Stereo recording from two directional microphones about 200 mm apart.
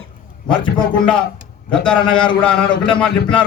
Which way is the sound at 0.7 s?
5° left (ahead or behind).